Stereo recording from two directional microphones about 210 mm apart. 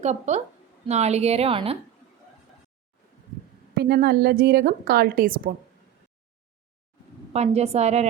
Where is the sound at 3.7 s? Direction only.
45° right (ahead or behind).